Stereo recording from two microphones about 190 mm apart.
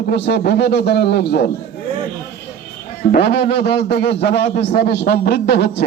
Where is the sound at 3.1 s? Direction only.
60° left (ahead or behind).